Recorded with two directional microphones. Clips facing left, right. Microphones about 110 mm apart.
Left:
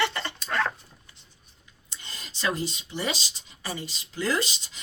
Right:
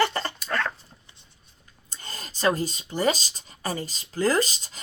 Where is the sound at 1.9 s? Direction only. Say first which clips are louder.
Right 4 dB; 45° right (ahead or behind).